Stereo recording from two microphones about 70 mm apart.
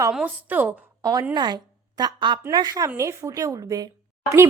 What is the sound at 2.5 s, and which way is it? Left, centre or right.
Speech, right.